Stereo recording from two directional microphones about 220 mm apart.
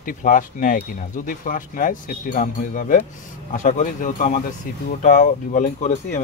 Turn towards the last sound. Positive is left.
turn(degrees=35)  # may be behind; listen again after turning